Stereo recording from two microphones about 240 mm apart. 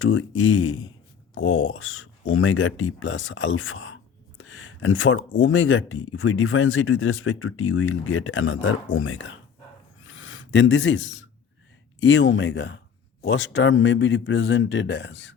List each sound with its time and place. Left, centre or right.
0.0 s speech: left
10.1 s a sound: left
11.9 s speech: left